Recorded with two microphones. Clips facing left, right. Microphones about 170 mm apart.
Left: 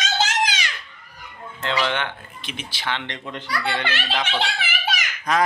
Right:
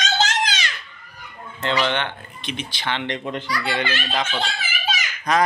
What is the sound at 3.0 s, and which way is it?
Speech, 15° right (ahead or behind).